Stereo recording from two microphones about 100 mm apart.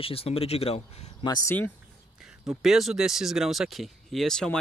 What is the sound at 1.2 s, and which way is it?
Speech, 40° left (ahead or behind).